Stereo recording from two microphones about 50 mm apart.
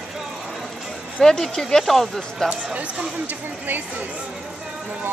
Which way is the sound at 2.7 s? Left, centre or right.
Right.